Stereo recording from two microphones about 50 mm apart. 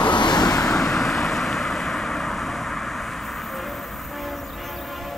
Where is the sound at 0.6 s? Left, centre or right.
Centre.